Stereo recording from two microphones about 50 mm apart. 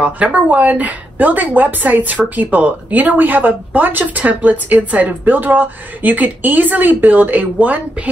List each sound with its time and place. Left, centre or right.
0.0 s speech: right